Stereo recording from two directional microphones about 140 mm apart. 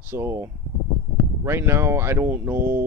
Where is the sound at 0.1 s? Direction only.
15° right (ahead or behind).